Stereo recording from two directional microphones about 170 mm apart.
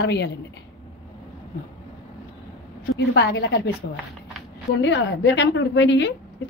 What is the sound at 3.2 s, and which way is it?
Speech, 90° left.